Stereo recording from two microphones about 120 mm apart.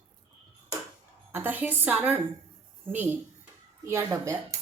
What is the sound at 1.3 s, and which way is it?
A woman's voice, 15° right (ahead or behind).